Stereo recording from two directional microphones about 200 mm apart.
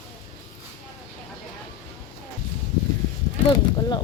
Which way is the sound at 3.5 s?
20° left (ahead or behind).